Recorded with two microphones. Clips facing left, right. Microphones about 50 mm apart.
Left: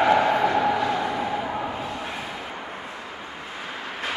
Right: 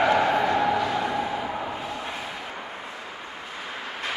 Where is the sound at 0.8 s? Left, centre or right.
Centre.